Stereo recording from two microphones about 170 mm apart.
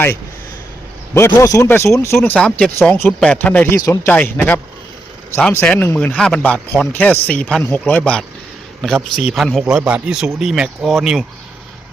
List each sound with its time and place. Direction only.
1.1 s speech: 15° left (ahead or behind)
3.8 s speech: 20° left (ahead or behind)
4.1 s speech: 10° left (ahead or behind)
9.3 s speech: centre (ahead or behind)